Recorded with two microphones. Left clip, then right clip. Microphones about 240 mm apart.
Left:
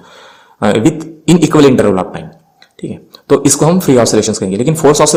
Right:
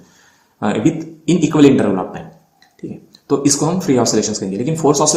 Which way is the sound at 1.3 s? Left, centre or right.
Left.